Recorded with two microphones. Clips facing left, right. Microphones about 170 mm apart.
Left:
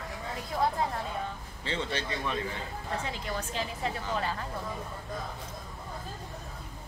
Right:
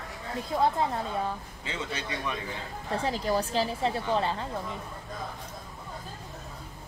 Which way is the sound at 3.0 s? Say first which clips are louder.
Right 8 dB; 35° right (ahead or behind).